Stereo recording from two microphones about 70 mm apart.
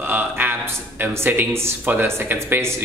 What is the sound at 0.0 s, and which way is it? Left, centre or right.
A man's voice, right.